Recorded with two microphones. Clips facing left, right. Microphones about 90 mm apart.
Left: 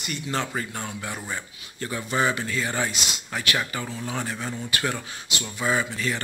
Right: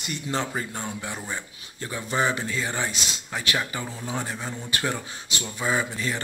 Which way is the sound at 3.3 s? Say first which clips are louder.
Left 1 dB; 20° right (ahead or behind).